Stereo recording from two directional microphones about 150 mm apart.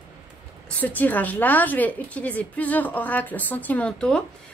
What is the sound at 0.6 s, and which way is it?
A woman's voice, 10° left (ahead or behind).